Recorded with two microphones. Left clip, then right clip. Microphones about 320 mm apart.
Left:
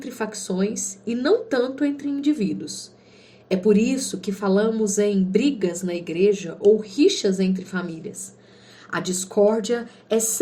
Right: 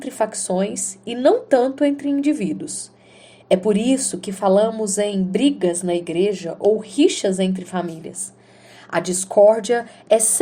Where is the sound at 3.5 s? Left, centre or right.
Right.